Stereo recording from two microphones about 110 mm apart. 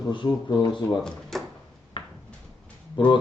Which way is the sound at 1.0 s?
5° left (ahead or behind).